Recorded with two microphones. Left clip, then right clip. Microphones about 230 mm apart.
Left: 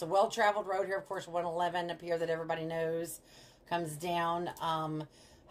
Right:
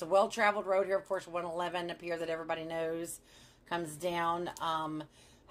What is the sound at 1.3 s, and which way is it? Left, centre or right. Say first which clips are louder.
Speech: left 3 dB; right.